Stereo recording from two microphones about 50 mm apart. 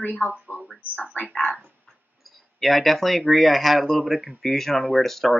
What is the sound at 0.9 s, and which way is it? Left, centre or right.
Speech, left.